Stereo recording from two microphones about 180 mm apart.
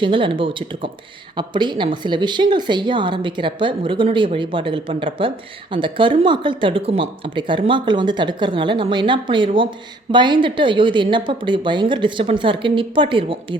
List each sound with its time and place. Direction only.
0.0 s a woman's voice: 30° right (ahead or behind)